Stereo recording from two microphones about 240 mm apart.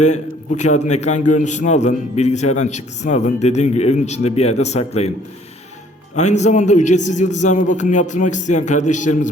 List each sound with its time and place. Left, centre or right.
0.0 s a man's voice: left
6.1 s a man's voice: left